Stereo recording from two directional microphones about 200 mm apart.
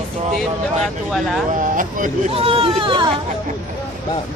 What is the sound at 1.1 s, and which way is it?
Speech, centre (ahead or behind).